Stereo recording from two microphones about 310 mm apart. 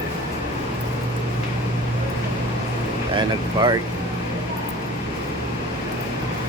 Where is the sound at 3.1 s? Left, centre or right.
Centre.